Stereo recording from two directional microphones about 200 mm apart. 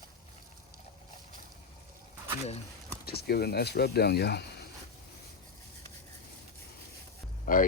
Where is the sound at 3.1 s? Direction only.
50° left (ahead or behind).